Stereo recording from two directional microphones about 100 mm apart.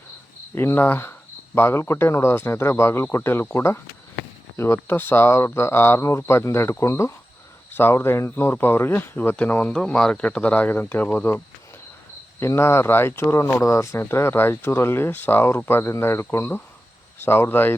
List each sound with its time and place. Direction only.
0.5 s speech: 25° left (ahead or behind)